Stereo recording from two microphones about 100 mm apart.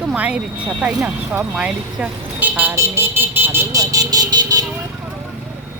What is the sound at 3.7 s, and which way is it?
Speech, 35° right (ahead or behind).